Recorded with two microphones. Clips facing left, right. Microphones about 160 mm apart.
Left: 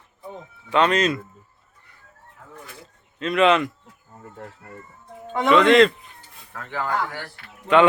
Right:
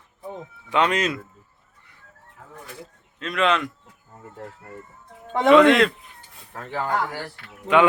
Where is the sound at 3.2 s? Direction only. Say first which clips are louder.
Left 4 dB; 5° left (ahead or behind).